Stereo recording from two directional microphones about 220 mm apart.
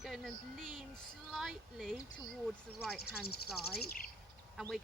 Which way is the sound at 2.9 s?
45° left (ahead or behind).